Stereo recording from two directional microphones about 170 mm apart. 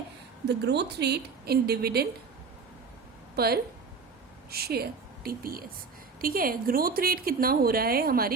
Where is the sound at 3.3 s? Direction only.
65° right (ahead or behind).